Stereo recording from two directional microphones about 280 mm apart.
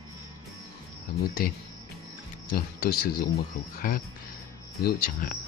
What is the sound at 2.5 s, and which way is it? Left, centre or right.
Speech, left.